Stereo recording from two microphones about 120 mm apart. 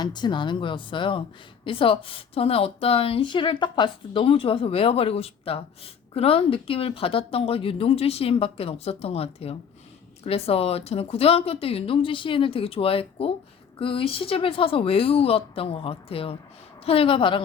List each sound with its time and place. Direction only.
0.0 s a woman's voice: 40° left (ahead or behind)